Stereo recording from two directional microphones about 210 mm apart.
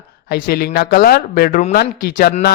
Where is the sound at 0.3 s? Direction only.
45° left (ahead or behind).